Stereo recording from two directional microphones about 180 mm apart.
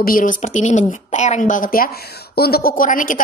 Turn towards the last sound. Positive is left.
turn(degrees=45)  # may be behind; listen again after turning